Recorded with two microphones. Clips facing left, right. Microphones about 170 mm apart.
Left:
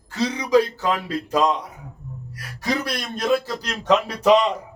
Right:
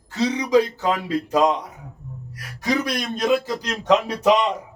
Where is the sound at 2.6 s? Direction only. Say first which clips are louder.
Right 2 dB; 15° right (ahead or behind).